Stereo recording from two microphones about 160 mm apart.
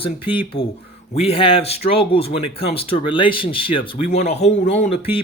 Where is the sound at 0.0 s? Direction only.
35° left (ahead or behind).